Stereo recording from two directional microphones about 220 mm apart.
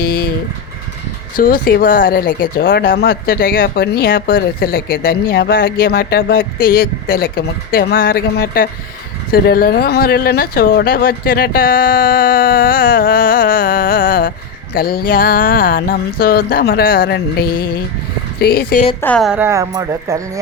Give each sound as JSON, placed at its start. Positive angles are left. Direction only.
{"t": 0.0, "sound": "a sound", "side_deg": 45}
{"t": 1.4, "sound": "speech", "side_deg": 40}
{"t": 19.0, "sound": "a woman's voice", "side_deg": 0}